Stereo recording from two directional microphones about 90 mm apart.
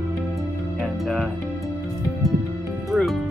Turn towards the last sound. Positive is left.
turn(degrees=0)  # may be behind; listen again after turning